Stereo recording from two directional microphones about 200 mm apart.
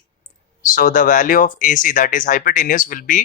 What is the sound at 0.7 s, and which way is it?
Speech, 40° left (ahead or behind).